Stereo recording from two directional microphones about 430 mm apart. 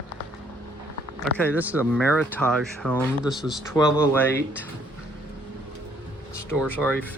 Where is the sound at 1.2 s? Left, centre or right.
Centre.